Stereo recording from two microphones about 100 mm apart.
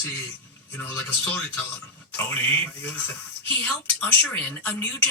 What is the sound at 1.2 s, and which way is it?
A man's voice, 20° left (ahead or behind).